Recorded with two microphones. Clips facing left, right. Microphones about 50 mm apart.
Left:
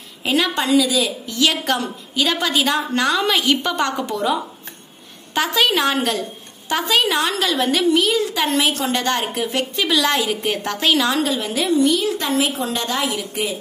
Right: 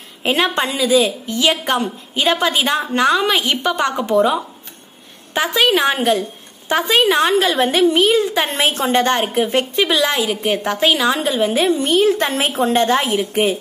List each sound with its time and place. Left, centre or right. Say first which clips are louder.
0.2 s a woman's voice: right 2 dB; right
1.4 s a woman's voice: right 2 dB; centre
11.2 s a woman's voice: right 5 dB; right